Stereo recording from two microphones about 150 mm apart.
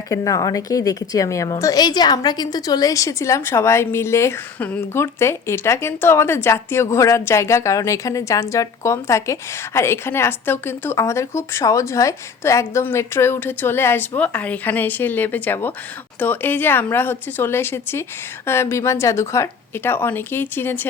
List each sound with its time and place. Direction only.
0.1 s a woman's voice: 20° left (ahead or behind)